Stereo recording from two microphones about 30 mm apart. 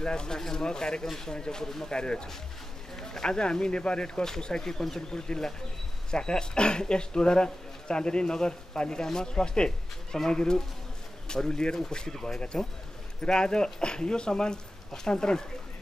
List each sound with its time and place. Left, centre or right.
0.0 s speech: left
4.2 s speech: left
12.1 s speech: centre
13.2 s speech: left